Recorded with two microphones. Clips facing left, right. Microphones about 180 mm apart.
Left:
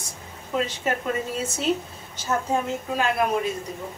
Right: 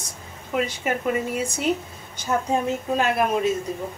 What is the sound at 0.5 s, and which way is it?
Speech, 15° right (ahead or behind).